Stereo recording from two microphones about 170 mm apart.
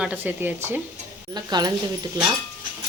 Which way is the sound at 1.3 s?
25° right (ahead or behind).